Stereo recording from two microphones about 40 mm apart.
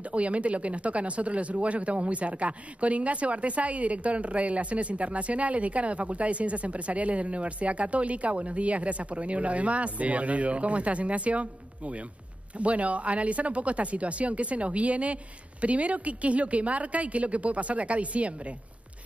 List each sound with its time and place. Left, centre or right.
0.1 s speech: right